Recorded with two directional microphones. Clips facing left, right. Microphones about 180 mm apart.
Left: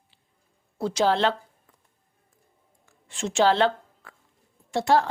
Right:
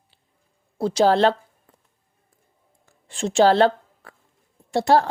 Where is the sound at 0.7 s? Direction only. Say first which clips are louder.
Right 5 dB; 35° right (ahead or behind).